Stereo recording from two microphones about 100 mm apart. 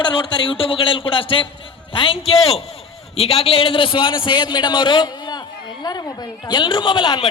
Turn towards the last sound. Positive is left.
turn(degrees=45)  # may be behind; listen again after turning